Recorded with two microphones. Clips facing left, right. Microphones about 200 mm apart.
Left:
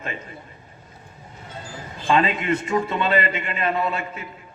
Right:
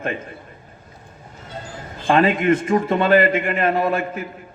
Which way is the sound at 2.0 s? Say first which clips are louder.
Right 5 dB; 50° right (ahead or behind).